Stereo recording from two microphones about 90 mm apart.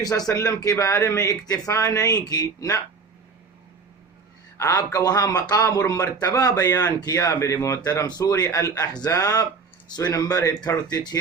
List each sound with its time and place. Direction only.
0.0 s speech: 40° left (ahead or behind)
4.5 s speech: 35° left (ahead or behind)
8.0 s speech: 45° left (ahead or behind)
8.4 s speech: 35° left (ahead or behind)
9.0 s speech: 40° left (ahead or behind)